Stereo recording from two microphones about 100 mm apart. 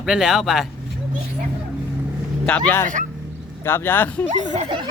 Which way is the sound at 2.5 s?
10° left (ahead or behind).